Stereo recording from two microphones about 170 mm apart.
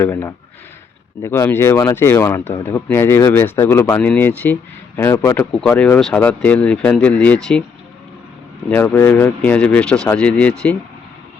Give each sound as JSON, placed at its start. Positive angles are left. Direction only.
{"t": 0.0, "sound": "speech", "side_deg": 15}
{"t": 8.7, "sound": "speech", "side_deg": 10}